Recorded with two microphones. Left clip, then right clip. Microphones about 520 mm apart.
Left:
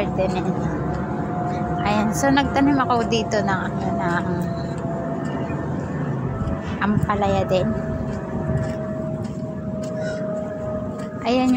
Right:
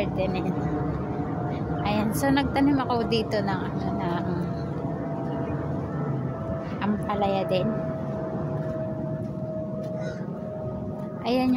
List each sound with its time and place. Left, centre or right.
0.0 s vehicle: right
1.8 s a woman's voice: right
6.8 s speech: right
11.2 s a woman's voice: right